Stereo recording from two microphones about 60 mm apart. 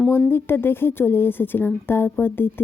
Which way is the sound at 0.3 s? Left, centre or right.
Left.